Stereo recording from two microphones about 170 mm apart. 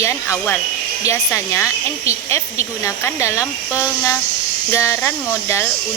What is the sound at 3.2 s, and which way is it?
Speech, 15° left (ahead or behind).